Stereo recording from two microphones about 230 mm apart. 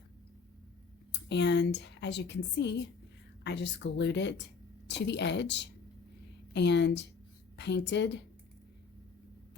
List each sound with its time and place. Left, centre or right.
1.1 s a woman's voice: left